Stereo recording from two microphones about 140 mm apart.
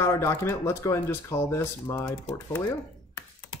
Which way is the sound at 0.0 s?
20° left (ahead or behind).